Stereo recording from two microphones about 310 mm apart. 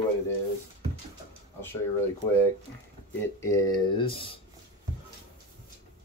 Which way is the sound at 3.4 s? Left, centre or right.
Centre.